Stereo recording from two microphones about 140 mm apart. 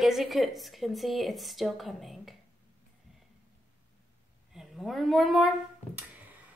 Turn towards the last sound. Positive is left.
turn(degrees=0)  # may be behind; listen again after turning